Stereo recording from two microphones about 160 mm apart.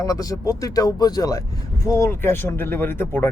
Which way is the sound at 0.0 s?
20° left (ahead or behind).